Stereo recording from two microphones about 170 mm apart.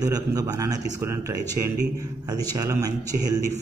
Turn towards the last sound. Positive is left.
turn(degrees=-20)  # may be behind; listen again after turning